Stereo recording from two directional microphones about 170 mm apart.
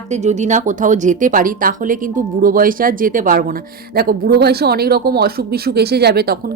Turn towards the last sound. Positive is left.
turn(degrees=-65)  # may be behind; listen again after turning